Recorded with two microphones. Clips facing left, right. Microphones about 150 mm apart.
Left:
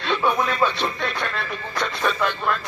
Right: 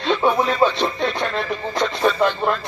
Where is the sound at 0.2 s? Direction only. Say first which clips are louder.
Right 3 dB; 25° right (ahead or behind).